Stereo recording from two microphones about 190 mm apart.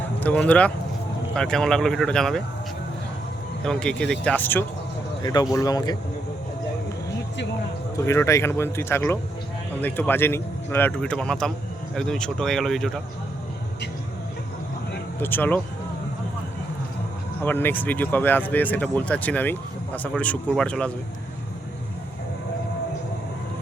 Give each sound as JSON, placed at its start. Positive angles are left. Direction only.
{"t": 0.2, "sound": "speech", "side_deg": 10}
{"t": 3.6, "sound": "speech", "side_deg": 5}
{"t": 5.2, "sound": "speech", "side_deg": 20}
{"t": 7.9, "sound": "speech", "side_deg": 15}
{"t": 15.2, "sound": "speech", "side_deg": 10}
{"t": 17.4, "sound": "speech", "side_deg": 10}